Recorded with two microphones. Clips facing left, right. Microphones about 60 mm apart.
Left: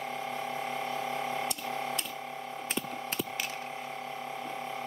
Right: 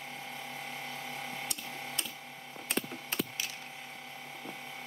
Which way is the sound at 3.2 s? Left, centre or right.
Left.